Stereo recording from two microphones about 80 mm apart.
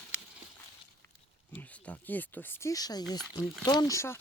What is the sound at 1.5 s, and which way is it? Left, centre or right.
Speech, centre.